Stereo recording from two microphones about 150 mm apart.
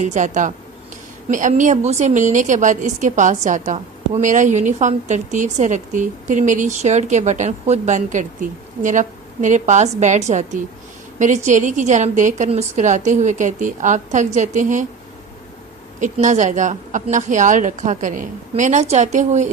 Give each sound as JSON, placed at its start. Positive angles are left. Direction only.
{"t": 0.0, "sound": "a woman's voice", "side_deg": -55}
{"t": 16.0, "sound": "a woman's voice", "side_deg": -55}